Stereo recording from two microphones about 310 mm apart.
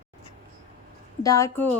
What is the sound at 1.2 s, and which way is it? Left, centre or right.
Speech, centre.